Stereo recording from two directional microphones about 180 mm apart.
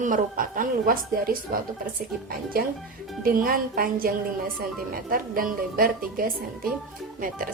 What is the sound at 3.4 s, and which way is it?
A woman's voice, 55° right (ahead or behind).